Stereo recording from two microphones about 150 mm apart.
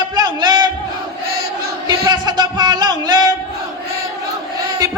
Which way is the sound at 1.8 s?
30° right (ahead or behind).